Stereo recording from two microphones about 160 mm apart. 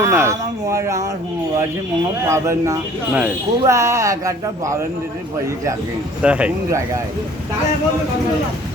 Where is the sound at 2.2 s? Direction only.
15° right (ahead or behind).